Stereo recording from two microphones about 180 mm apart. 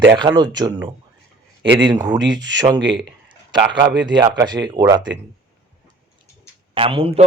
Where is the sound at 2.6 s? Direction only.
25° right (ahead or behind).